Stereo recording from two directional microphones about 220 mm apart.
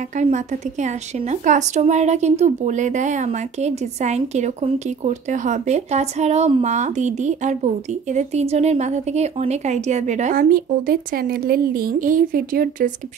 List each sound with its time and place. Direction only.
0.8 s speech: 35° right (ahead or behind)